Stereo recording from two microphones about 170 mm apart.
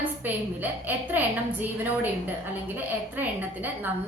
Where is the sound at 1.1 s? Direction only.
10° right (ahead or behind).